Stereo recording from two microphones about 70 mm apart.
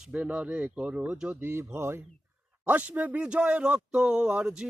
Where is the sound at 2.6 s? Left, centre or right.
Right.